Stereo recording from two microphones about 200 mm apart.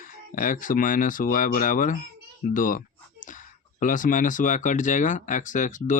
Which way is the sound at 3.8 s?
40° left (ahead or behind).